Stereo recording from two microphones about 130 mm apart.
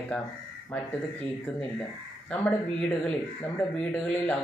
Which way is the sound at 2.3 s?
10° left (ahead or behind).